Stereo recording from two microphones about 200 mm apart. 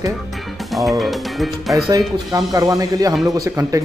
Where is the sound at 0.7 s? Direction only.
Centre (ahead or behind).